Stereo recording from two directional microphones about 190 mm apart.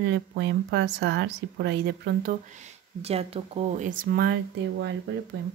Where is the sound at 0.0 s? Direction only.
65° right (ahead or behind).